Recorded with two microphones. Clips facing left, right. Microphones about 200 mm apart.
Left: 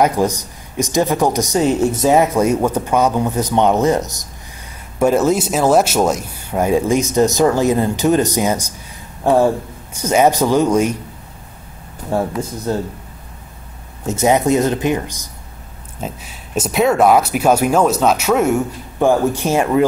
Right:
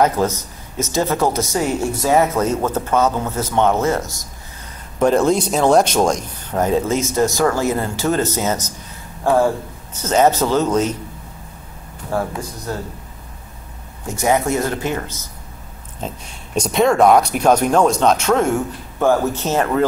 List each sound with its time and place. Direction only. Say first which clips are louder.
0.0 s a woman's voice: left 1 dB; 15° left (ahead or behind)
4.9 s a woman's voice: left 1 dB; 5° left (ahead or behind)
12.1 s speech: left 3 dB; 25° left (ahead or behind)
14.0 s a woman's voice: left 3 dB; 20° left (ahead or behind)
16.0 s a woman's voice: left 1 dB; 5° left (ahead or behind)